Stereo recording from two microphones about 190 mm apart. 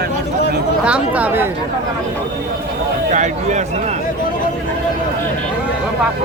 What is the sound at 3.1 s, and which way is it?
Speech, 40° right (ahead or behind).